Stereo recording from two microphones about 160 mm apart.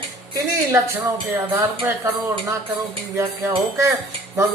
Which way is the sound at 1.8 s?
15° right (ahead or behind).